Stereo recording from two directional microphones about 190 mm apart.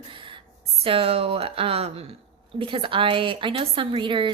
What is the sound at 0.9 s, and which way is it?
A woman's voice, 30° right (ahead or behind).